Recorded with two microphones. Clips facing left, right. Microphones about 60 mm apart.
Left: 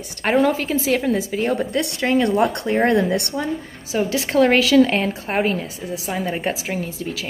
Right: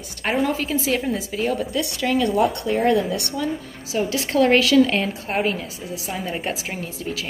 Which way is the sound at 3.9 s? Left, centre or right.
Left.